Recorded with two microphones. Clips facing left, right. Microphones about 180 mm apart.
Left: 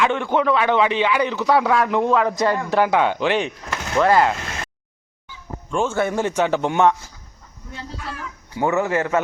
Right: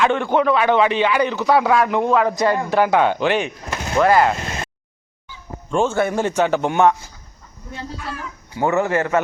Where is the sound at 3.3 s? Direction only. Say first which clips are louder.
Right 1 dB; 25° left (ahead or behind).